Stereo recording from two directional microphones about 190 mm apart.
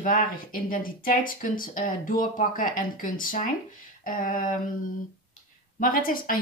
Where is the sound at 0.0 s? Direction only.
45° left (ahead or behind).